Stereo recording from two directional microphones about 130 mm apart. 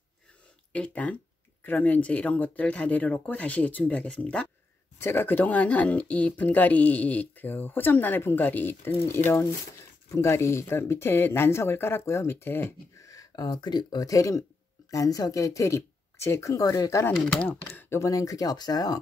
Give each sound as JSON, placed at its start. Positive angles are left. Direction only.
{"t": 0.7, "sound": "speech", "side_deg": 10}
{"t": 17.2, "sound": "speech", "side_deg": 5}
{"t": 17.5, "sound": "speech", "side_deg": 20}